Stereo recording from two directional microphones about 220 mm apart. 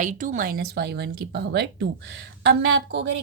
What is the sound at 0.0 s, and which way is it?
Speech, 35° right (ahead or behind).